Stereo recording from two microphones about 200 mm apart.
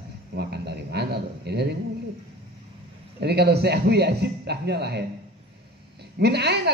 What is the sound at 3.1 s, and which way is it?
A man's voice, 55° right (ahead or behind).